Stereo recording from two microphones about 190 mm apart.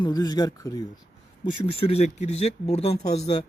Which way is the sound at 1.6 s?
35° left (ahead or behind).